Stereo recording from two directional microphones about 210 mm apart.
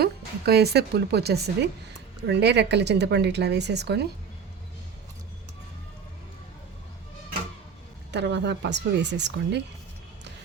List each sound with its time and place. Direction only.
0.0 s speech: 50° right (ahead or behind)
8.1 s speech: 55° right (ahead or behind)